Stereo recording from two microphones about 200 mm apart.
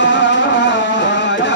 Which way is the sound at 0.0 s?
65° left (ahead or behind).